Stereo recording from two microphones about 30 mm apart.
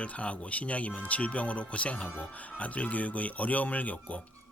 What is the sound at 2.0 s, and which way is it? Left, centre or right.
Speech, left.